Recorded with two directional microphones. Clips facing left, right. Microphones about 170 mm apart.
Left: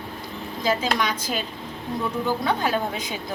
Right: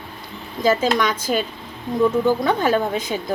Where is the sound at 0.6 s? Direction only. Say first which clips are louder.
Right 6 dB; 50° right (ahead or behind).